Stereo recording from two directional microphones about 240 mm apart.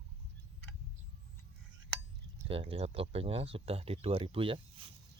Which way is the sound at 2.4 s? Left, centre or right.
Right.